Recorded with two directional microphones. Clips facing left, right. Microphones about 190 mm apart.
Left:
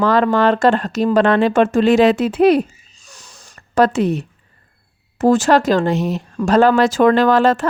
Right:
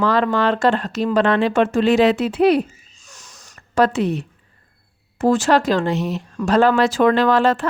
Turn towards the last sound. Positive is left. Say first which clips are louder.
# left 3 dB
turn(degrees=45)  # may be behind; listen again after turning